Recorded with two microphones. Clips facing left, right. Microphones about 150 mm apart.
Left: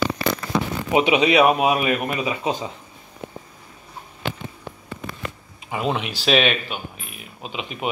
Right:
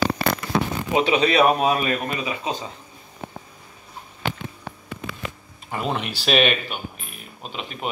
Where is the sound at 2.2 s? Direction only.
20° left (ahead or behind).